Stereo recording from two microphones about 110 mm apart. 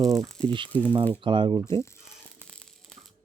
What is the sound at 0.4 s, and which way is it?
Speech, 50° right (ahead or behind).